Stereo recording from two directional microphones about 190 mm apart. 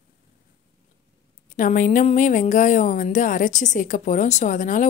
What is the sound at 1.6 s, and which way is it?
Speech, 45° left (ahead or behind).